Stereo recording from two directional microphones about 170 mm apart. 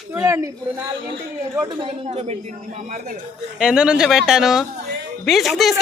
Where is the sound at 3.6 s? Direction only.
5° right (ahead or behind).